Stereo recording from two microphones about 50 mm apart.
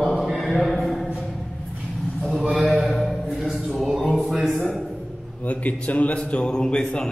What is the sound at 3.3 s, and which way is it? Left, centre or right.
Music, centre.